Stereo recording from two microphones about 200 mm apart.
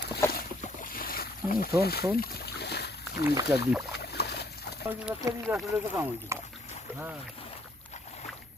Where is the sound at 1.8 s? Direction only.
50° left (ahead or behind).